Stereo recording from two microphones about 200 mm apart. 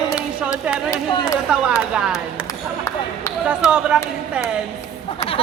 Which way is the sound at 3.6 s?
5° right (ahead or behind).